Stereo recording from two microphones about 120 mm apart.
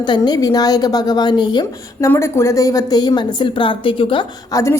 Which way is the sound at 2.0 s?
25° left (ahead or behind).